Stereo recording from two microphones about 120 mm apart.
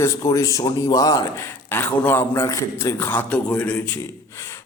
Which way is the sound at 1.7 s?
20° left (ahead or behind).